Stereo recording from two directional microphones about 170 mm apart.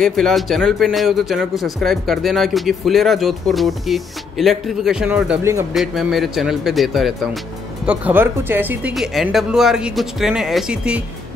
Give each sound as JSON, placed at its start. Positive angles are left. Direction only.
{"t": 0.0, "sound": "a man's voice", "side_deg": 0}
{"t": 5.4, "sound": "speech", "side_deg": -15}
{"t": 5.7, "sound": "a man's voice", "side_deg": 0}